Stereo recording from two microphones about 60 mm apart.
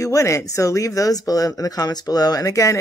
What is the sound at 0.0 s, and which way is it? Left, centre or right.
Speech, left.